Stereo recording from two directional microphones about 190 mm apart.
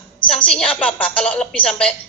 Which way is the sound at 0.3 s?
5° left (ahead or behind).